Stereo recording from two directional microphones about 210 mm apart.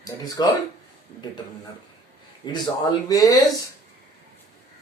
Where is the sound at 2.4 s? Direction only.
20° left (ahead or behind).